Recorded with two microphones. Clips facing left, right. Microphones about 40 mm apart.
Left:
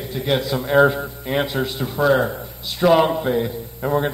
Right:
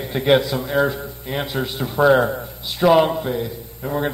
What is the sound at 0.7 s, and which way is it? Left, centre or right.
A man's voice, centre.